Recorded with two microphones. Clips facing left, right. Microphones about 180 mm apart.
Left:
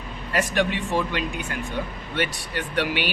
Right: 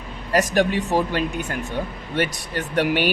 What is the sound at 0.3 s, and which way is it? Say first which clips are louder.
Speech: right 4 dB; 40° right (ahead or behind).